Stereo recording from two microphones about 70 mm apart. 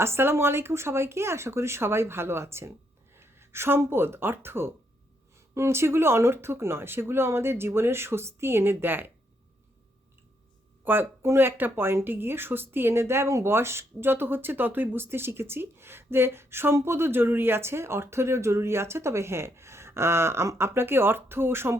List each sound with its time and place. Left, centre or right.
0.0 s speech: right
10.8 s speech: right